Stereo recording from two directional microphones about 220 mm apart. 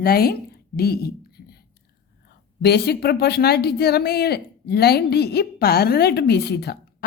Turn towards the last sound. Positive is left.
turn(degrees=50)  # may be behind; listen again after turning